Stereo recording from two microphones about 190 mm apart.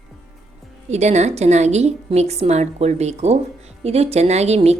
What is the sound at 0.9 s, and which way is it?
A woman's voice, 35° right (ahead or behind).